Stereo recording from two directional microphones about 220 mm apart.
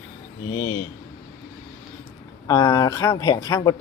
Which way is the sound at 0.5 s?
15° left (ahead or behind).